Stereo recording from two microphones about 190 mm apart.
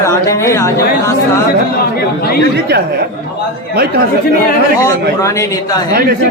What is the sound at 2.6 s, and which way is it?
Speech, 55° right (ahead or behind).